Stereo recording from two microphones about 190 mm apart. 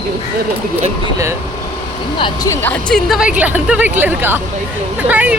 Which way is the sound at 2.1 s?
25° left (ahead or behind).